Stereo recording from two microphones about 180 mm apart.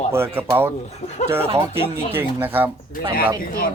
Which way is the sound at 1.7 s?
10° right (ahead or behind).